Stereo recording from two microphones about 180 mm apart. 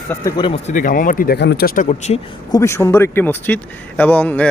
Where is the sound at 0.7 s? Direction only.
50° left (ahead or behind).